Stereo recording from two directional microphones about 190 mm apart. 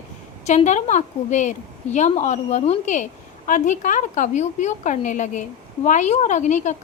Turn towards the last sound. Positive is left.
turn(degrees=40)  # may be behind; listen again after turning